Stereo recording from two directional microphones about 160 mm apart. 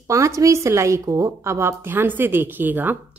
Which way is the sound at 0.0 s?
20° right (ahead or behind).